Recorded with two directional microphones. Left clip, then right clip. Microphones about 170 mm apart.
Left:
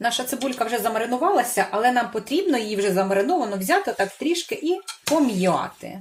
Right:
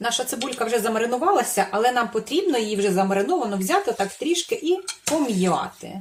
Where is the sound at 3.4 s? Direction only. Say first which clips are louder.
Left 1 dB; 20° left (ahead or behind).